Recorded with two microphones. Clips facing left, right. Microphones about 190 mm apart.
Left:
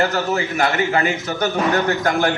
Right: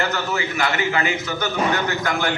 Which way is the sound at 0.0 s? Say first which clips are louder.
Left 4 dB; 40° left (ahead or behind).